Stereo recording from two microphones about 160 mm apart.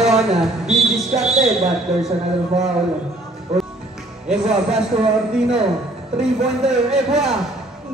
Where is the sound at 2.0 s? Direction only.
40° right (ahead or behind).